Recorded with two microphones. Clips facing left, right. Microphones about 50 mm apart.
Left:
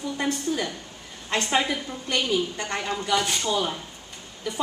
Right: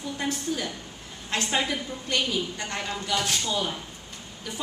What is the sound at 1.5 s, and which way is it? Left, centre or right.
A woman's voice, centre.